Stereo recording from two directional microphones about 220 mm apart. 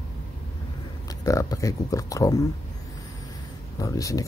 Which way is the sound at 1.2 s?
15° left (ahead or behind).